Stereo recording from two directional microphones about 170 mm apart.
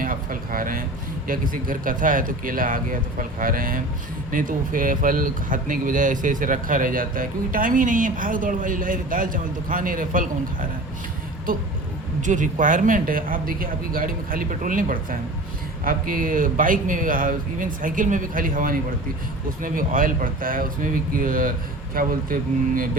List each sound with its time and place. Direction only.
0.0 s a sound: 55° right (ahead or behind)
1.3 s speech: 55° right (ahead or behind)
12.2 s speech: 45° right (ahead or behind)